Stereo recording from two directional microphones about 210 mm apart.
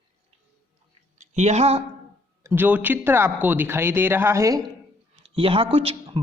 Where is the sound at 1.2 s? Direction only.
35° right (ahead or behind).